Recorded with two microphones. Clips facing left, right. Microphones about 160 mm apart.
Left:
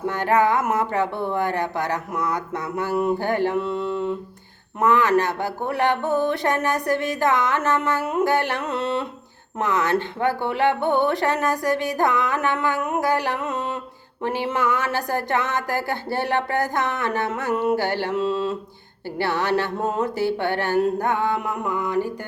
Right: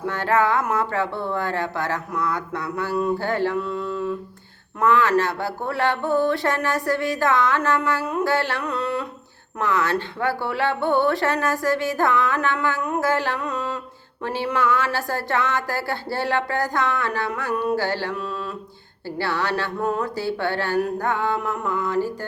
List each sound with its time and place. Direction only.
0.0 s speech: 15° left (ahead or behind)